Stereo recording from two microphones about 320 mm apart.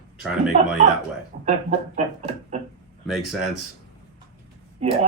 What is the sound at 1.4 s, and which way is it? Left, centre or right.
Music, centre.